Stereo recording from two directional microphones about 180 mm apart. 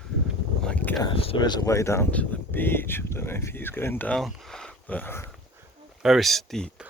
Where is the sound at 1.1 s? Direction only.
30° left (ahead or behind); by 5.3 s 10° left (ahead or behind).